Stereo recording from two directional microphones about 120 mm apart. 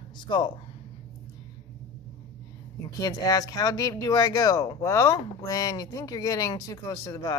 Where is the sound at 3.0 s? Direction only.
30° left (ahead or behind).